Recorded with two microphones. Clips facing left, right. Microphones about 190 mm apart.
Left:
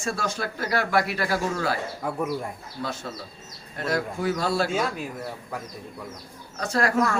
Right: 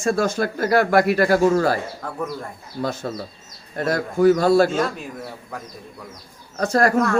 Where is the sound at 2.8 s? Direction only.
45° right (ahead or behind).